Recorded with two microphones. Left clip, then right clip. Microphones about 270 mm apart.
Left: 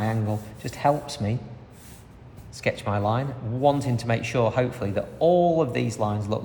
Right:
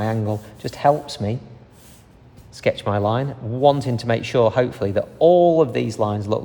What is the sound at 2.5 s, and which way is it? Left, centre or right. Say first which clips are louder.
Speech: right 6 dB; right.